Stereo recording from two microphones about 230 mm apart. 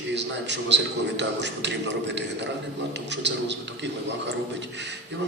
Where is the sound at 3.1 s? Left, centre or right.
Right.